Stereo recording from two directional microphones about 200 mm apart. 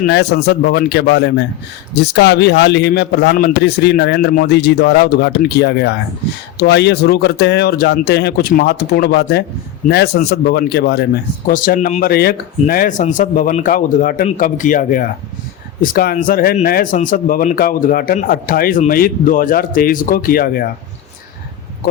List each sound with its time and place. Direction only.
0.0 s a man's voice: 55° left (ahead or behind)